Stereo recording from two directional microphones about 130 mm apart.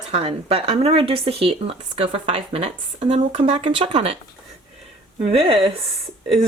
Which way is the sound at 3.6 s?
40° right (ahead or behind).